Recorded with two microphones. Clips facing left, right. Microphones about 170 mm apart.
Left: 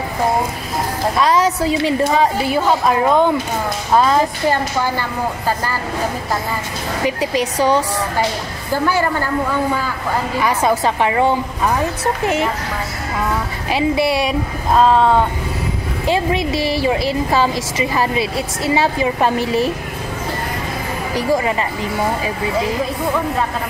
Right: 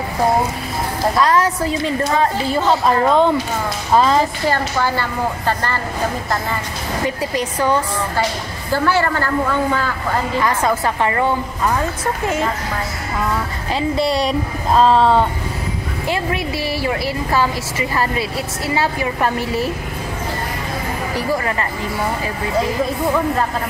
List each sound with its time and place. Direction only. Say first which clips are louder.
1.1 s a woman's voice: left 1 dB; 15° left (ahead or behind)
4.5 s a woman's voice: left 1 dB; 15° left (ahead or behind)
7.1 s a woman's voice: left 5 dB; 15° left (ahead or behind)
13.7 s speech: left 2 dB; 10° left (ahead or behind)
16.1 s a woman's voice: left 4 dB; 20° left (ahead or behind)
21.3 s a woman's voice: left 4 dB; 15° left (ahead or behind)